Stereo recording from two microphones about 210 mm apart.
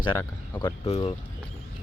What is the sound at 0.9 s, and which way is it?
Speech, 30° left (ahead or behind).